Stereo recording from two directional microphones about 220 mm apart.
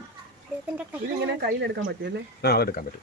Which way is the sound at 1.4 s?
50° right (ahead or behind).